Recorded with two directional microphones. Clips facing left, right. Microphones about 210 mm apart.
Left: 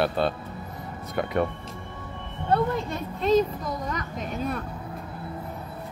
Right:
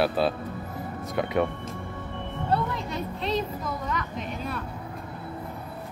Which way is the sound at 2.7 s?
50° left (ahead or behind).